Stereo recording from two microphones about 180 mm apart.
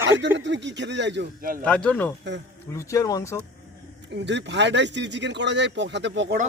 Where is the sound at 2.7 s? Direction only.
20° left (ahead or behind).